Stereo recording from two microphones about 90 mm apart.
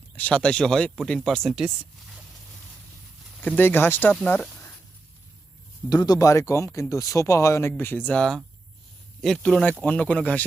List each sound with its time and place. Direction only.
0.2 s speech: 15° left (ahead or behind)
3.4 s speech: 20° left (ahead or behind)
5.9 s speech: 45° left (ahead or behind)
7.7 s speech: 20° left (ahead or behind)